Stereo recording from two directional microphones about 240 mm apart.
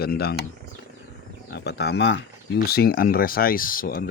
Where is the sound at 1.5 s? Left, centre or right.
Left.